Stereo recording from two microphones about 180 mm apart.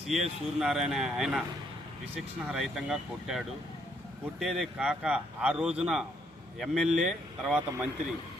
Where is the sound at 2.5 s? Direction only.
Centre (ahead or behind).